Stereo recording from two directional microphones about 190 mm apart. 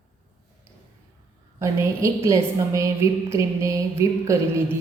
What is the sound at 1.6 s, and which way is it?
A woman's voice, 15° right (ahead or behind).